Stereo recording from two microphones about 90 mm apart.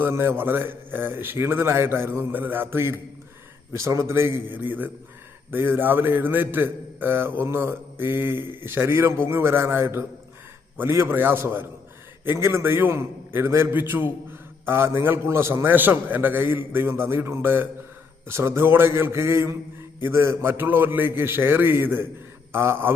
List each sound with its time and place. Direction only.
0.0 s a man's voice: 25° right (ahead or behind)